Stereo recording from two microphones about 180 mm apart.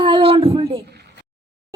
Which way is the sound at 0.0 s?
30° right (ahead or behind).